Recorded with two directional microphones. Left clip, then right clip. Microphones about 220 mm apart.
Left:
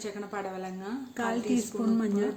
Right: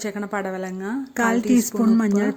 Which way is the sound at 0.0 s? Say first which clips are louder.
Right 9 dB; 40° right (ahead or behind).